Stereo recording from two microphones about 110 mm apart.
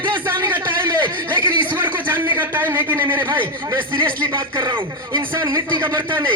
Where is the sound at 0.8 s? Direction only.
45° right (ahead or behind).